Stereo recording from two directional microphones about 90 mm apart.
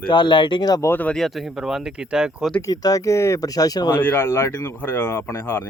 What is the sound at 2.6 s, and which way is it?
Speech, 45° left (ahead or behind).